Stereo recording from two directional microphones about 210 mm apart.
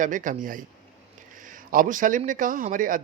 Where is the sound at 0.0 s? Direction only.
40° right (ahead or behind).